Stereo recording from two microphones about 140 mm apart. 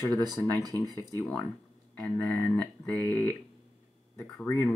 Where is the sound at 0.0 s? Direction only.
30° right (ahead or behind).